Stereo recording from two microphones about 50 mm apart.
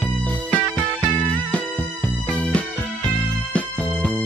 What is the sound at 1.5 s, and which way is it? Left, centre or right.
Music, left.